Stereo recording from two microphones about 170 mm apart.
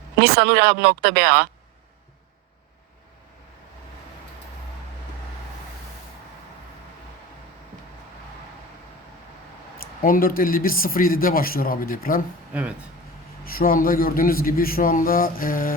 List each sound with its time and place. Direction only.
0.2 s speech: 70° right (ahead or behind)
9.7 s speech: 55° left (ahead or behind)
13.4 s speech: 60° left (ahead or behind)